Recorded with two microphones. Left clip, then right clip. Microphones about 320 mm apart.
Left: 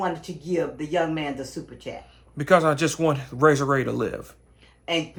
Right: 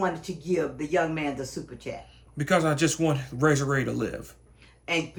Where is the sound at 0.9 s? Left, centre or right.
Left.